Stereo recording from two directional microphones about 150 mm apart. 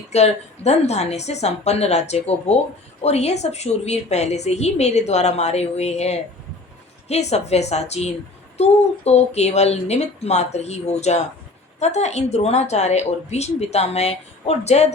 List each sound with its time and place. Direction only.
0.1 s a woman's voice: 45° left (ahead or behind)